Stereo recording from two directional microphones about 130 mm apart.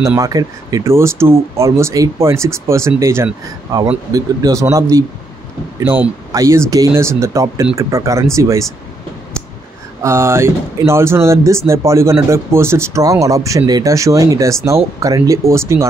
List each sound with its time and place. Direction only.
0.2 s speech: 30° right (ahead or behind)
10.0 s speech: 20° right (ahead or behind)